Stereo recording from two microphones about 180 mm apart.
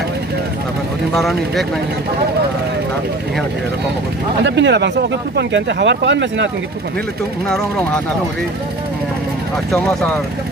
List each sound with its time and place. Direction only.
1.1 s speech: centre (ahead or behind)
4.4 s speech: 75° right (ahead or behind)
7.4 s speech: 5° left (ahead or behind)
9.7 s speech: 5° left (ahead or behind)